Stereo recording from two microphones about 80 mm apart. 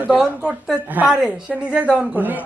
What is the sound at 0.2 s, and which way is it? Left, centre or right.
A man's voice, centre.